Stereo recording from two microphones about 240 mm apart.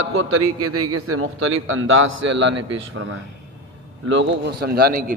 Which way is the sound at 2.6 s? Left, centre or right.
Right.